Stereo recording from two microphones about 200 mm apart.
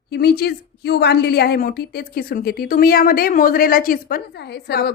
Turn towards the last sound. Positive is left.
turn(degrees=55)  # may be behind; listen again after turning